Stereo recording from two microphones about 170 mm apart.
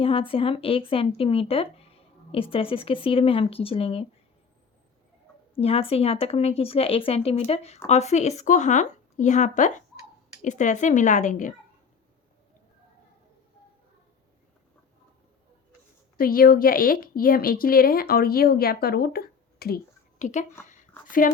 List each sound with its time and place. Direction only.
0.0 s speech: 35° left (ahead or behind)
5.5 s speech: 35° left (ahead or behind)
16.1 s speech: 60° left (ahead or behind)
20.1 s a woman's voice: 45° left (ahead or behind)